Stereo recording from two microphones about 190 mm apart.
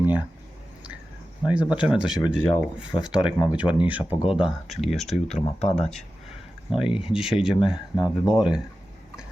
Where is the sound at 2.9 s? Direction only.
20° left (ahead or behind).